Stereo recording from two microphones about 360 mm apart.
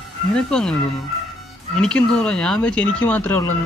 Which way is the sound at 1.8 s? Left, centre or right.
Centre.